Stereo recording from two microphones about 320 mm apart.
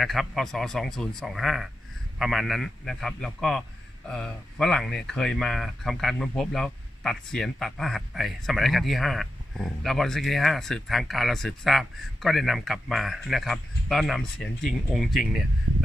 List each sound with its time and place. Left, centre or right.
0.0 s speech: centre